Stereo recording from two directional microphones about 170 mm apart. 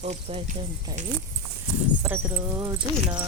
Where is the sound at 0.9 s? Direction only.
20° right (ahead or behind).